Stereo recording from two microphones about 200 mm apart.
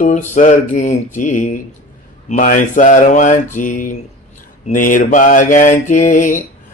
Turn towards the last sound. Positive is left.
turn(degrees=40)  # may be behind; listen again after turning